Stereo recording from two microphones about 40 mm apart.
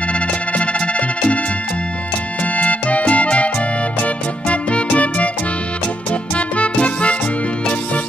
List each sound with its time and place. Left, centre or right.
0.1 s music: left
2.5 s music: left
6.3 s music: left